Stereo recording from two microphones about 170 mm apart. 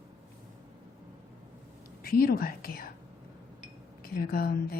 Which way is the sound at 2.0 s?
60° left (ahead or behind).